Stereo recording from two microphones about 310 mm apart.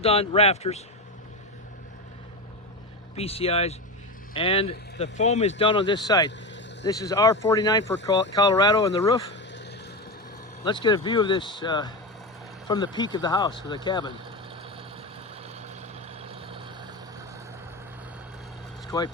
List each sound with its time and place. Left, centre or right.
0.0 s speech: centre
3.2 s speech: centre
9.3 s vehicle: left
10.6 s speech: centre
15.4 s vehicle: right
18.9 s speech: centre